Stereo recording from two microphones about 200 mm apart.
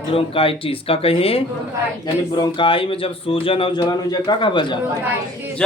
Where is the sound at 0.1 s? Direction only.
25° left (ahead or behind).